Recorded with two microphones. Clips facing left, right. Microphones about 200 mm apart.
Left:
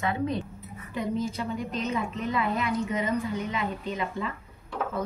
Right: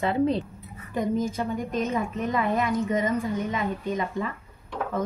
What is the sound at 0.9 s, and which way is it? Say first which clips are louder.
A woman's voice: right 4 dB; 45° right (ahead or behind).